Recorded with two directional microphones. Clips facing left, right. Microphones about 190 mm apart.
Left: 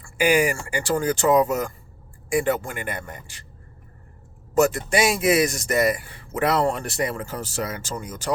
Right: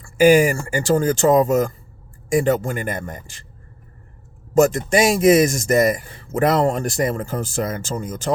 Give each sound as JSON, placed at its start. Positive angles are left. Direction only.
{"t": 0.0, "sound": "a man's voice", "side_deg": -45}
{"t": 4.5, "sound": "a man's voice", "side_deg": -45}